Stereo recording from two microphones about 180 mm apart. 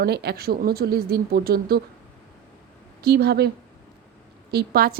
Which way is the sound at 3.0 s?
60° right (ahead or behind).